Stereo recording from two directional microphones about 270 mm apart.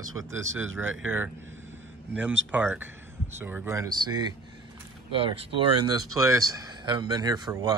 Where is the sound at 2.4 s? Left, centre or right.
Centre.